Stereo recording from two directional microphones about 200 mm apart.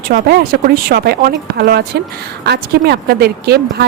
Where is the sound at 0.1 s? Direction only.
50° right (ahead or behind).